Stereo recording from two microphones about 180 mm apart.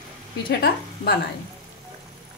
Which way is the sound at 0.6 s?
55° left (ahead or behind).